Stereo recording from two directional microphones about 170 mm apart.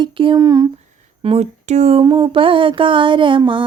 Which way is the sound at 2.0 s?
30° right (ahead or behind).